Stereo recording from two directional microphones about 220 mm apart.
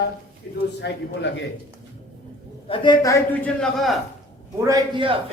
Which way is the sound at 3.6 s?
Centre (ahead or behind).